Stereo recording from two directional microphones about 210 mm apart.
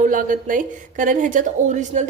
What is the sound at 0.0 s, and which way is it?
A woman's voice, 40° right (ahead or behind).